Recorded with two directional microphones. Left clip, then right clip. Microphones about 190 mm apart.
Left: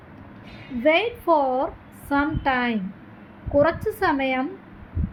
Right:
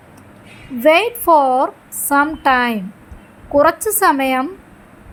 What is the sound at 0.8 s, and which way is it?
A woman's voice, 30° right (ahead or behind).